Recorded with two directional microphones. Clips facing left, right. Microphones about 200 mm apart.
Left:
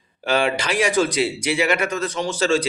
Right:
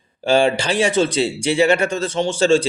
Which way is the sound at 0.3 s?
30° right (ahead or behind).